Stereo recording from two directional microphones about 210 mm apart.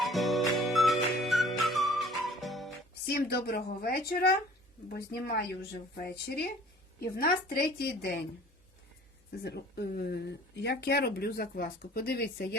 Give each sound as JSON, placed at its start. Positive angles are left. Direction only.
{"t": 0.0, "sound": "music", "side_deg": 0}
{"t": 3.1, "sound": "speech", "side_deg": 45}
{"t": 9.4, "sound": "speech", "side_deg": 50}